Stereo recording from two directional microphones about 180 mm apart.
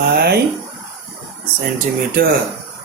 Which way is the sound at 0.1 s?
60° right (ahead or behind).